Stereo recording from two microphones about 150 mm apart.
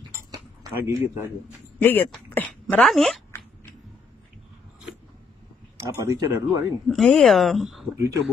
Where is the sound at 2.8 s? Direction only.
Centre (ahead or behind).